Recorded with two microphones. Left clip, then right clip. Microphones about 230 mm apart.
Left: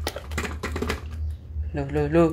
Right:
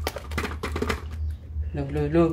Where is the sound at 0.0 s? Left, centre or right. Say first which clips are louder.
Even; centre.